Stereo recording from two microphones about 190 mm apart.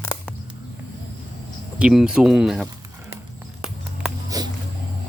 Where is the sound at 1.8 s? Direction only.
5° right (ahead or behind).